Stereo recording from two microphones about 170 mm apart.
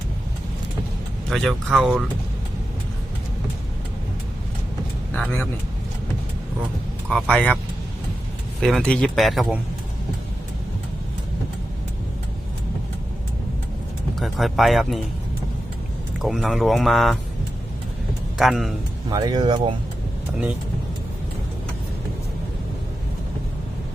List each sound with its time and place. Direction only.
1.3 s speech: centre (ahead or behind)
5.1 s speech: 5° left (ahead or behind)
7.1 s speech: 5° left (ahead or behind)
8.6 s speech: 5° left (ahead or behind)
14.2 s speech: centre (ahead or behind)
16.2 s speech: centre (ahead or behind)
18.3 s speech: centre (ahead or behind)
19.1 s speech: 25° right (ahead or behind)